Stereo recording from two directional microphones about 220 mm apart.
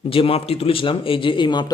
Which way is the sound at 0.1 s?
25° left (ahead or behind).